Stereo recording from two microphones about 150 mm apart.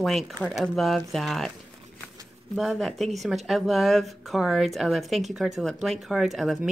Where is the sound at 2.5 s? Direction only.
Centre (ahead or behind).